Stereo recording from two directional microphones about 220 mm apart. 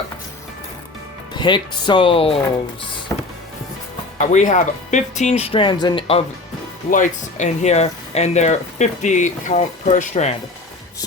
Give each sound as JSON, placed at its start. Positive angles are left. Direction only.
{"t": 1.3, "sound": "speech", "side_deg": 20}
{"t": 4.2, "sound": "speech", "side_deg": 35}
{"t": 6.9, "sound": "speech", "side_deg": 35}